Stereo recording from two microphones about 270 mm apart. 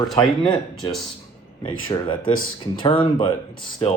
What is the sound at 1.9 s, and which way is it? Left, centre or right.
Speech, centre.